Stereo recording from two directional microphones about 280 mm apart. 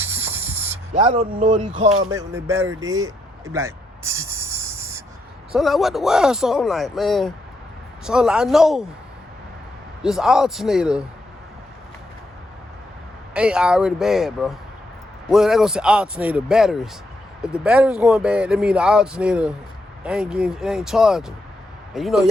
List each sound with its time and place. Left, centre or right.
0.3 s spray: centre
0.9 s speech: right
2.0 s a sound: centre
5.5 s speech: centre
10.0 s speech: centre
13.3 s speech: centre